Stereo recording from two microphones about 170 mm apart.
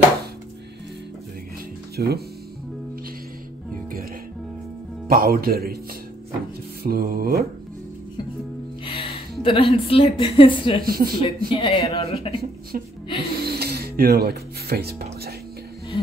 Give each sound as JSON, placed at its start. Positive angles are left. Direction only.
{"t": 2.0, "sound": "speech", "side_deg": -65}
{"t": 5.0, "sound": "speech", "side_deg": -60}
{"t": 6.8, "sound": "speech", "side_deg": -60}
{"t": 8.8, "sound": "a woman's voice", "side_deg": 35}
{"t": 10.8, "sound": "speech", "side_deg": -60}
{"t": 11.2, "sound": "speech", "side_deg": 30}
{"t": 12.7, "sound": "speech", "side_deg": -55}
{"t": 13.2, "sound": "music", "side_deg": -65}